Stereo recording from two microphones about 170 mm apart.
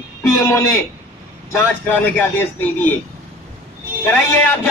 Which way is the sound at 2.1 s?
10° left (ahead or behind).